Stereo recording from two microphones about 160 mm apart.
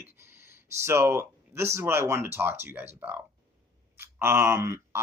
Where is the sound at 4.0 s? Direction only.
15° right (ahead or behind).